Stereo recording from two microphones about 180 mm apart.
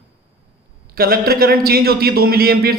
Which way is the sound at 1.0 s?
55° right (ahead or behind).